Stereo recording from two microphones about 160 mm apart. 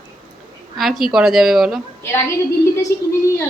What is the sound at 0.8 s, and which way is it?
A woman's voice, centre (ahead or behind).